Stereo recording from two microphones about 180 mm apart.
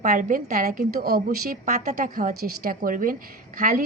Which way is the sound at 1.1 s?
40° right (ahead or behind).